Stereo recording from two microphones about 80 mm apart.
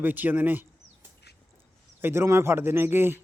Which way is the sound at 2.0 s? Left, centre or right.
Right.